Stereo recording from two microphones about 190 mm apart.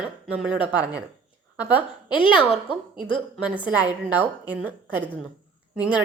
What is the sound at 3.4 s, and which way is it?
A woman's voice, 5° right (ahead or behind).